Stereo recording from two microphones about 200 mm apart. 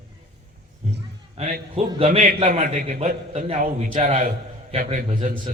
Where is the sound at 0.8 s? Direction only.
30° right (ahead or behind).